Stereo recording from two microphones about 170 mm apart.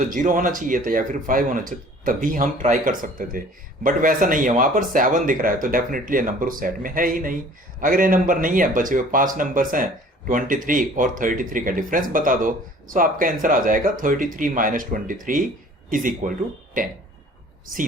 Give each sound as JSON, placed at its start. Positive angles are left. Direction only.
{"t": 0.1, "sound": "speech", "side_deg": -50}